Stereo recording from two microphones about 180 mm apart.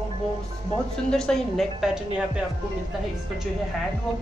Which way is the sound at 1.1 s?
5° left (ahead or behind).